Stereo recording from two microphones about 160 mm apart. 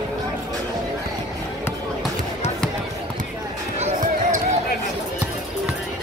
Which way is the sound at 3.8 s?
50° right (ahead or behind).